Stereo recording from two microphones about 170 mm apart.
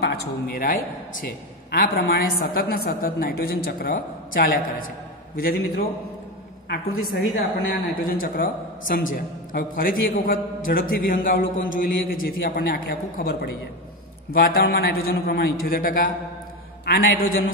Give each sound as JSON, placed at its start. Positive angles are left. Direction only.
{"t": 0.0, "sound": "a man's voice", "side_deg": 70}